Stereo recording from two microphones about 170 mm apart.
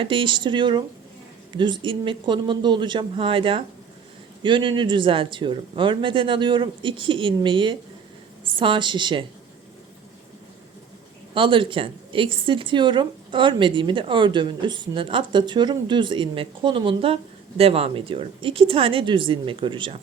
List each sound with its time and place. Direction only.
0.0 s a woman's voice: 30° right (ahead or behind)
11.3 s a woman's voice: 30° right (ahead or behind)